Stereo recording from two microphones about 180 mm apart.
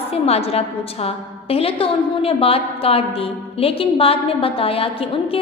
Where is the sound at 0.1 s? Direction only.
35° left (ahead or behind).